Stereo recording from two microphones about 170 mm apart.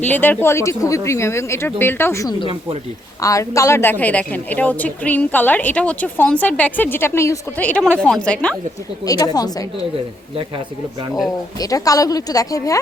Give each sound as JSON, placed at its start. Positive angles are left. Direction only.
{"t": 0.1, "sound": "a woman's voice", "side_deg": 10}
{"t": 9.0, "sound": "speech", "side_deg": 20}
{"t": 11.6, "sound": "speech", "side_deg": 20}